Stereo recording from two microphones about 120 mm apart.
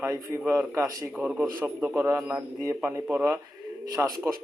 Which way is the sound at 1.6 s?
15° right (ahead or behind).